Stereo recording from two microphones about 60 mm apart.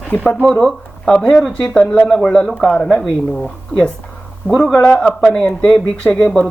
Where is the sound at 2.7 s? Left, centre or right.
Centre.